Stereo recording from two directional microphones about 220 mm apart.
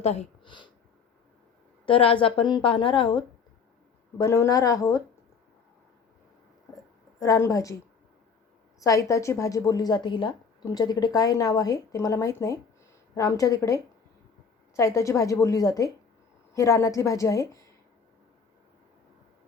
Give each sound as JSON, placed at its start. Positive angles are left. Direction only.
{"t": 0.0, "sound": "speech", "side_deg": 30}
{"t": 1.9, "sound": "a woman's voice", "side_deg": 25}
{"t": 7.2, "sound": "a woman's voice", "side_deg": 15}
{"t": 8.8, "sound": "a woman's voice", "side_deg": 15}